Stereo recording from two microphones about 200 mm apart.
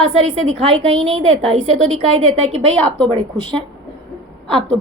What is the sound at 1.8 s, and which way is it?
Speech, 30° right (ahead or behind).